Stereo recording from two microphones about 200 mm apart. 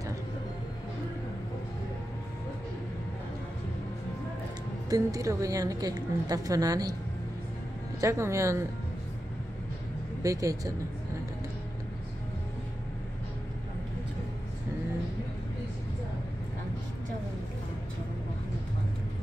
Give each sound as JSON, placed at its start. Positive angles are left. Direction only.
{"t": 4.8, "sound": "a woman's voice", "side_deg": -15}
{"t": 8.0, "sound": "a woman's voice", "side_deg": -15}
{"t": 10.2, "sound": "a woman's voice", "side_deg": -15}